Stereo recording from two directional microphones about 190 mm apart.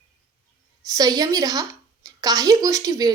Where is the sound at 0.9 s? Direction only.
20° right (ahead or behind).